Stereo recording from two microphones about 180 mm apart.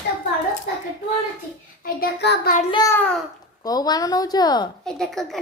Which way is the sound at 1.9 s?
60° left (ahead or behind).